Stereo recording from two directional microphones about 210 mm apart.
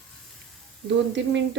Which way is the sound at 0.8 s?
60° right (ahead or behind).